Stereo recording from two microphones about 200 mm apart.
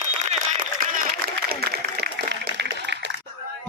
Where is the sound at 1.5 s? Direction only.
50° right (ahead or behind).